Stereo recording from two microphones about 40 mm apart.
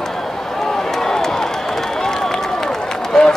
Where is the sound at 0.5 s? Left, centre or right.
Centre.